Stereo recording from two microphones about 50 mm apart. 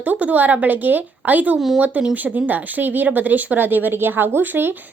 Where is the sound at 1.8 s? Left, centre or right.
Right.